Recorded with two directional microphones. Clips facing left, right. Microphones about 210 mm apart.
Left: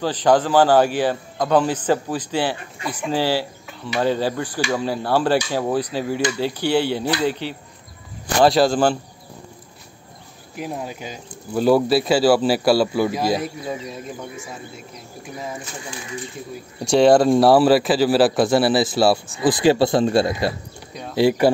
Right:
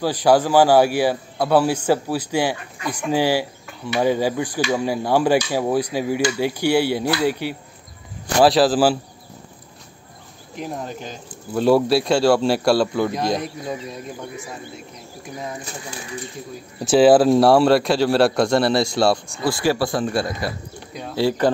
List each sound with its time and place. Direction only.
0.0 s speech: 10° right (ahead or behind)
10.5 s speech: 5° left (ahead or behind)
16.8 s speech: 5° right (ahead or behind)
19.4 s speech: 20° left (ahead or behind)
21.1 s speech: 15° left (ahead or behind)